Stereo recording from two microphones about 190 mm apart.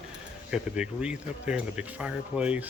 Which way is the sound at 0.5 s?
5° right (ahead or behind).